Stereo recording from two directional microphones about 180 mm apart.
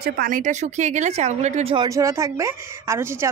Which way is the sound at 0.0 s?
55° right (ahead or behind).